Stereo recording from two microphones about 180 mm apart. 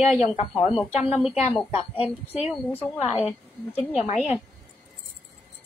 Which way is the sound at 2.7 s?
10° left (ahead or behind).